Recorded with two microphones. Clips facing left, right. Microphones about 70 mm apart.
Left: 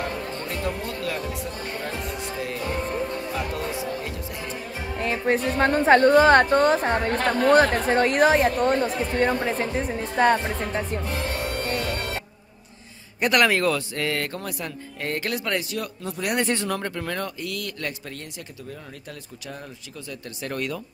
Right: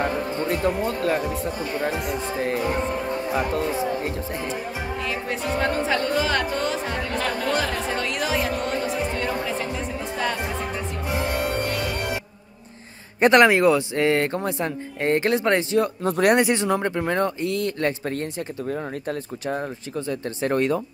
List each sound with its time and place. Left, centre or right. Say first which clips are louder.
0.0 s music: right 6 dB; right
0.9 s speech: right 6 dB; right
1.9 s speech: right 5 dB; centre
2.2 s speech: right 6 dB; right
4.9 s music: left 7 dB; left
5.6 s speech: left 7 dB; left
11.1 s speech: right 3 dB; centre
13.2 s speech: right 5 dB; right
16.0 s speech: right 9 dB; right
16.3 s speech: right 4 dB; centre